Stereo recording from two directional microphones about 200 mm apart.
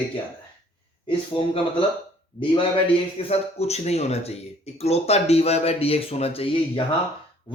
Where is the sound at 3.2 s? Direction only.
30° left (ahead or behind).